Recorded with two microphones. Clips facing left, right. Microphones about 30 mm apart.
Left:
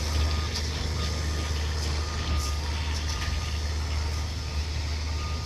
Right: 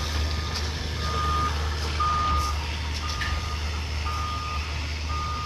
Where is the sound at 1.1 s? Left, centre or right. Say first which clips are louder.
Right 9 dB; right.